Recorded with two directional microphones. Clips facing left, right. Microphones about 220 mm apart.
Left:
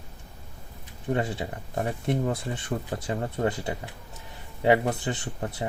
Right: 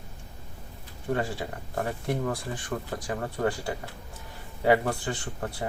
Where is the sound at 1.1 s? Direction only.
20° left (ahead or behind).